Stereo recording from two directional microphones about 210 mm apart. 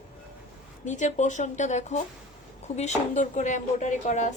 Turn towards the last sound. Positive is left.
turn(degrees=35)  # may be behind; listen again after turning